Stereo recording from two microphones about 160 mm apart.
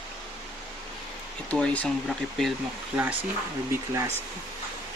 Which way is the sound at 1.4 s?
10° left (ahead or behind).